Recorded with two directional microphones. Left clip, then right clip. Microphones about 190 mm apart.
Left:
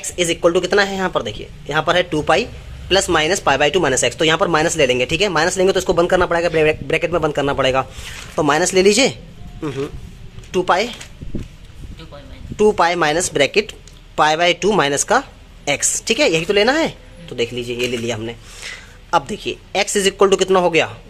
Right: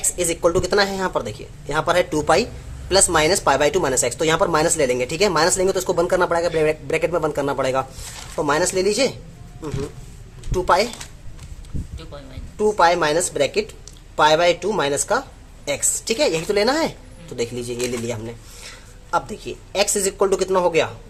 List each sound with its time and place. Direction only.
0.2 s speech: 10° left (ahead or behind)
8.4 s speech: 25° left (ahead or behind)
10.5 s speech: 15° left (ahead or behind)
12.5 s a man's voice: 25° left (ahead or behind)